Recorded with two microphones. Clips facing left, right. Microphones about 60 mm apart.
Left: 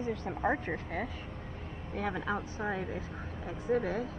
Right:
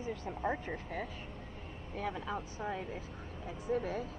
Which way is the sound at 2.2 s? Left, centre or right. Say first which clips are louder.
Left 4 dB; left.